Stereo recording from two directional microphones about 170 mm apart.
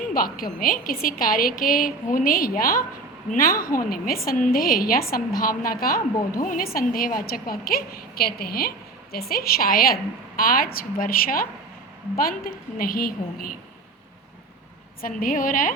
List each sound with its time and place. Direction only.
0.3 s a woman's voice: 55° left (ahead or behind)
15.0 s a woman's voice: 55° left (ahead or behind)